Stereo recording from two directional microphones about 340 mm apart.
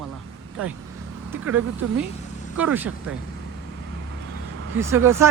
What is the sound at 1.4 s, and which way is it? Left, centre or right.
Speech, right.